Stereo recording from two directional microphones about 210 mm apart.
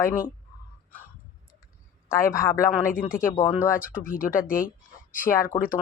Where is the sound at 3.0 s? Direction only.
40° left (ahead or behind).